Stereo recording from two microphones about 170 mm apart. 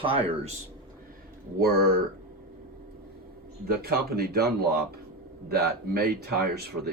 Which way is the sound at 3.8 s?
65° right (ahead or behind).